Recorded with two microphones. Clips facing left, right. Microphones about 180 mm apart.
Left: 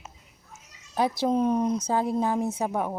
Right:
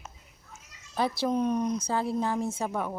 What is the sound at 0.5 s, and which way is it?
A woman's voice, 10° left (ahead or behind).